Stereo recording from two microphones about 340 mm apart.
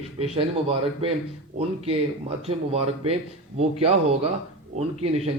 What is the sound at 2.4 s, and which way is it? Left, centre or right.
Speech, centre.